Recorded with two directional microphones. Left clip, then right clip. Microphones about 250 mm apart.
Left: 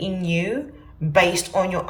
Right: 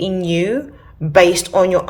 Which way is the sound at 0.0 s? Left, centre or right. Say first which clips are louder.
Right 7 dB; centre.